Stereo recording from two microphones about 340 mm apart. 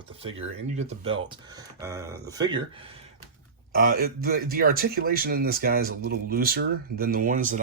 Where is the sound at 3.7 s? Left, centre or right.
Right.